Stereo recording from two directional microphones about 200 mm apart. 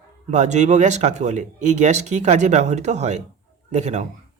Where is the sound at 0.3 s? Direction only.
35° right (ahead or behind).